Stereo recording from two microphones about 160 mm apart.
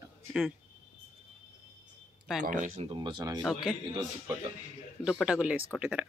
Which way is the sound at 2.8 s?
30° right (ahead or behind).